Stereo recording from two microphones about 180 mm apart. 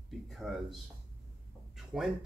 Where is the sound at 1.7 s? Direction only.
Centre (ahead or behind).